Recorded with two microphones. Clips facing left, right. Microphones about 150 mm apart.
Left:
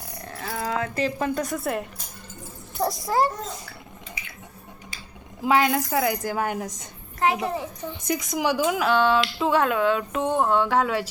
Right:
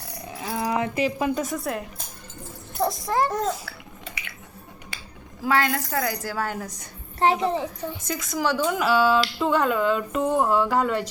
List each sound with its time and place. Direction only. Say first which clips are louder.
0.3 s speech: right 2 dB; 10° right (ahead or behind)
1.5 s a woman's voice: left 1 dB; centre (ahead or behind)
2.8 s speech: even; centre (ahead or behind)
3.2 s bathtub: right 5 dB; 85° right
5.4 s a woman's voice: left 2 dB; 15° left (ahead or behind)
7.2 s a child's voice: right 2 dB; 30° right (ahead or behind)
8.0 s a woman's voice: left 2 dB; 15° left (ahead or behind)